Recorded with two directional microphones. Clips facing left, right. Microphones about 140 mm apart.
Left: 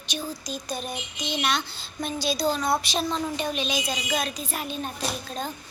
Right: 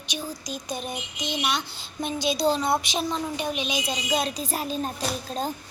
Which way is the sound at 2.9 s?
15° right (ahead or behind).